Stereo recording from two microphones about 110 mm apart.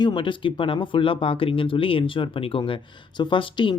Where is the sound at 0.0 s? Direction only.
45° left (ahead or behind).